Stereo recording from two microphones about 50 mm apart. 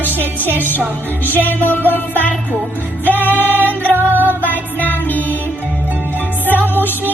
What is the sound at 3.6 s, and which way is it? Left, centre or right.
Music, left.